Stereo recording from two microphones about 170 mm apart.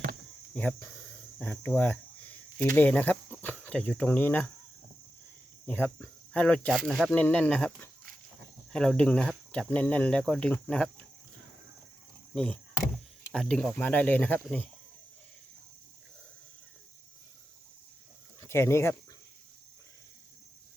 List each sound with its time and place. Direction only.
0.5 s speech: 10° left (ahead or behind)
5.6 s speech: 10° left (ahead or behind)
12.3 s speech: 5° left (ahead or behind)
18.3 s speech: 15° left (ahead or behind)